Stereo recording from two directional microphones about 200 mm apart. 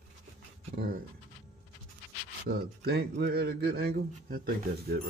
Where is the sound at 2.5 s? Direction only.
50° right (ahead or behind).